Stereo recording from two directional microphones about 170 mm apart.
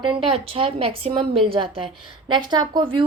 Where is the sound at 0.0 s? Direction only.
30° right (ahead or behind).